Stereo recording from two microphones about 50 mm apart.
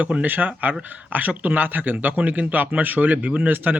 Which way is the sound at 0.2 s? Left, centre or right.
Right.